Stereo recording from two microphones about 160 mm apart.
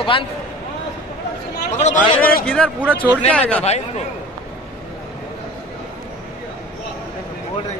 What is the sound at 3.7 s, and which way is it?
Speech, 40° left (ahead or behind).